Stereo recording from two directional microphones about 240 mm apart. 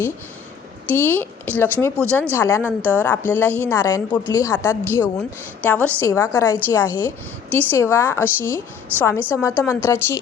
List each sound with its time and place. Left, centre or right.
0.9 s a woman's voice: centre